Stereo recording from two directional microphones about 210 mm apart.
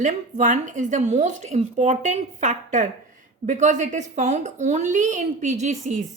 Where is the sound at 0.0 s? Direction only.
35° right (ahead or behind).